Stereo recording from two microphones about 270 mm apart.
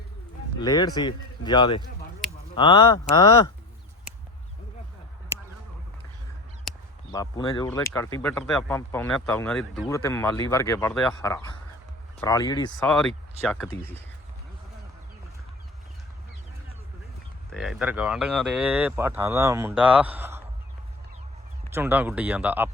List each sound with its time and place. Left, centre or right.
0.6 s speech: centre
7.1 s speech: centre
13.5 s speech: centre
17.5 s speech: centre
21.7 s speech: centre